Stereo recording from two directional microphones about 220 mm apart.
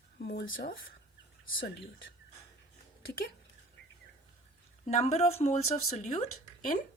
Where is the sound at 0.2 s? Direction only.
50° left (ahead or behind).